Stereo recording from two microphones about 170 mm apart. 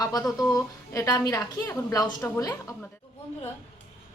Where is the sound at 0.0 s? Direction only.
20° left (ahead or behind).